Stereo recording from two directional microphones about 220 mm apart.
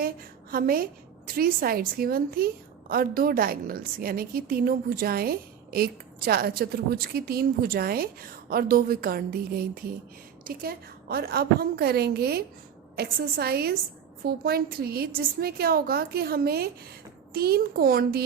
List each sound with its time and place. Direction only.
0.5 s a woman's voice: 40° right (ahead or behind)